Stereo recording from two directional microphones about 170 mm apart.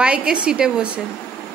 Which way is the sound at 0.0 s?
5° right (ahead or behind).